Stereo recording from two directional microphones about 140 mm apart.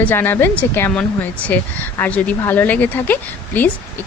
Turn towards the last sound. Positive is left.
turn(degrees=10)  # may be behind; listen again after turning